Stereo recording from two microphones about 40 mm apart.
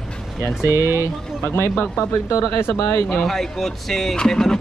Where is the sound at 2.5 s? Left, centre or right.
Left.